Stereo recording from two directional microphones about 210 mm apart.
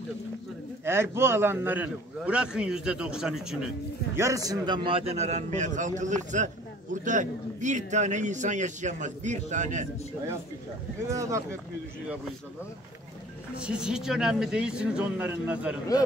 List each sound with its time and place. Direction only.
0.8 s a man's voice: 10° right (ahead or behind)
4.2 s a man's voice: 15° right (ahead or behind); by 9.8 s 35° right (ahead or behind)
11.1 s a man's voice: 15° right (ahead or behind)
13.6 s a man's voice: 5° right (ahead or behind)